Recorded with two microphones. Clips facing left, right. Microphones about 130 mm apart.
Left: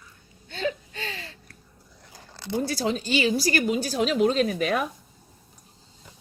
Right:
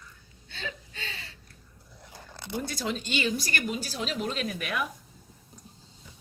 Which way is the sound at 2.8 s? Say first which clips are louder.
Left 5 dB; 35° left (ahead or behind).